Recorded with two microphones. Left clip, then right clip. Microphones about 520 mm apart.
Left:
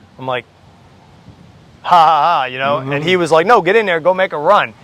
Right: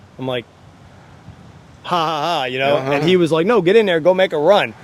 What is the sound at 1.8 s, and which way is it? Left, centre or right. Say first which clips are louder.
Speech: left 9 dB; left.